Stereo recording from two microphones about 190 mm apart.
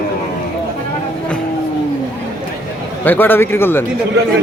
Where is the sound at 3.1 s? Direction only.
10° left (ahead or behind).